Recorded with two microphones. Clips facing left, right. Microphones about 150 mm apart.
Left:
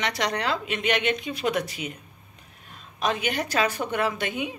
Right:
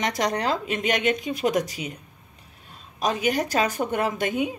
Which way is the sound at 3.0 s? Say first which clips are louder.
Right 3 dB; 35° right (ahead or behind).